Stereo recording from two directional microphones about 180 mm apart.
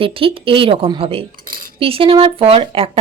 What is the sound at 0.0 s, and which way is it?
Speech, 30° right (ahead or behind).